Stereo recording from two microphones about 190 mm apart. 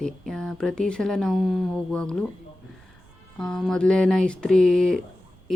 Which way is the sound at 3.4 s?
5° left (ahead or behind).